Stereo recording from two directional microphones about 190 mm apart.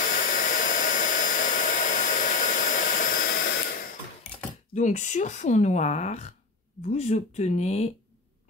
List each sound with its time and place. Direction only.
0.0 s hair dryer: 45° left (ahead or behind)
4.7 s speech: 40° left (ahead or behind)